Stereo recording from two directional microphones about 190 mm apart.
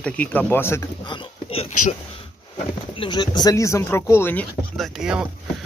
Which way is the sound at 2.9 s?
25° left (ahead or behind).